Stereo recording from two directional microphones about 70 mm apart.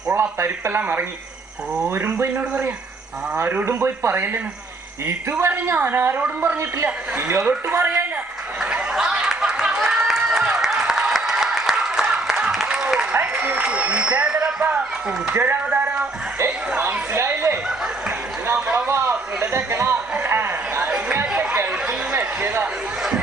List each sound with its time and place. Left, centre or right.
0.1 s a man's voice: right
5.4 s speech: right
8.6 s a sound: centre
12.6 s applause: centre
13.1 s run: centre
15.3 s a man's voice: right
15.7 s a sound: centre
16.7 s a man's voice: right
17.1 s speech: right
18.9 s a man's voice: right
20.1 s a sound: right
21.1 s chatter: right
21.8 s a sound: right